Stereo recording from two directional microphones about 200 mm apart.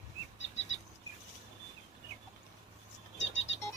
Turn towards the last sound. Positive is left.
turn(degrees=65)  # may be behind; listen again after turning